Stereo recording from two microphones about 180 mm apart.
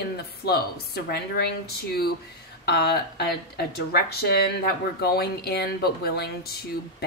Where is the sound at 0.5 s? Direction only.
60° left (ahead or behind).